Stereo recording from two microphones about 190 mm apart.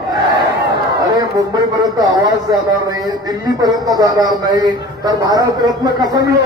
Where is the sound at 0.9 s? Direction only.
20° right (ahead or behind).